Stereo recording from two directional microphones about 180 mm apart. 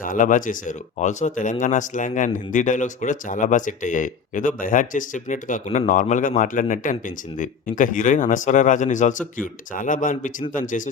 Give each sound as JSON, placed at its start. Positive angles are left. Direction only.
{"t": 0.0, "sound": "speech", "side_deg": 45}